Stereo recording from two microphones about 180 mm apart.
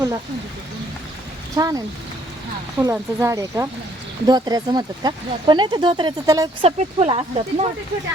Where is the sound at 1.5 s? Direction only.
20° right (ahead or behind).